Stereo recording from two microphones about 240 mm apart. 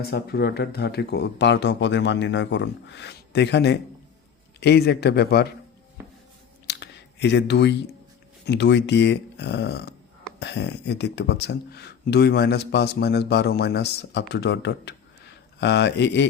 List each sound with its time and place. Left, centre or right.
0.0 s speech: left
6.7 s a sound: left
8.4 s speech: left